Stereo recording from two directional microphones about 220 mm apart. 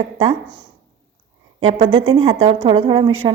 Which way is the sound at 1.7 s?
25° right (ahead or behind).